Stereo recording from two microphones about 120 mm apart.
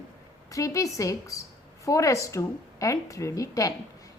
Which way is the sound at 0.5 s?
25° left (ahead or behind).